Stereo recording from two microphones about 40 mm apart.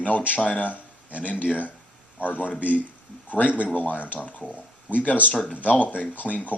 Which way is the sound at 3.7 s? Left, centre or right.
Left.